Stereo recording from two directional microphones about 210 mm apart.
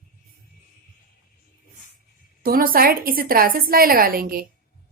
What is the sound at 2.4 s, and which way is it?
A woman's voice, 45° right (ahead or behind).